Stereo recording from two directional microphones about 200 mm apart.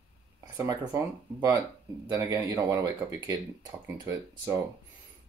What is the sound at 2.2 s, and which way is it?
Speech, 20° right (ahead or behind).